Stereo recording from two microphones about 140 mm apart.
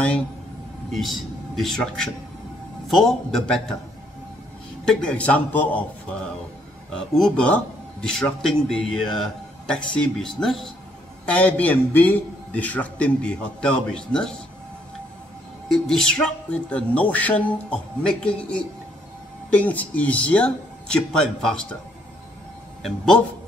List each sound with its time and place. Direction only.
0.9 s a man's voice: centre (ahead or behind)
4.8 s a man's voice: 10° left (ahead or behind)
15.7 s a man's voice: 5° left (ahead or behind)
22.8 s speech: 5° left (ahead or behind)